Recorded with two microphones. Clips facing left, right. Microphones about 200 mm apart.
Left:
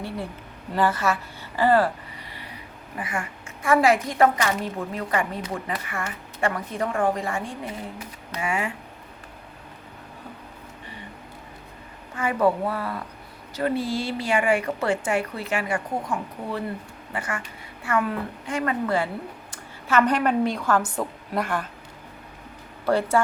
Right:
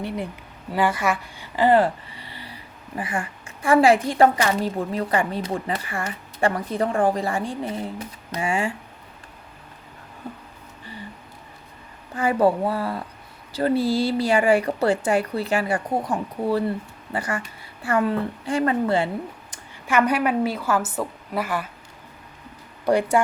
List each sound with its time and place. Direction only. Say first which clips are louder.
0.7 s a sound: right 1 dB; 10° right (ahead or behind); by 2.6 s 30° right (ahead or behind)
3.0 s a woman's voice: right 2 dB; 30° right (ahead or behind)
12.1 s a woman's voice: right 3 dB; 30° right (ahead or behind)
19.5 s a woman's voice: left 2 dB; 10° right (ahead or behind)
22.9 s speech: right 2 dB; 15° right (ahead or behind)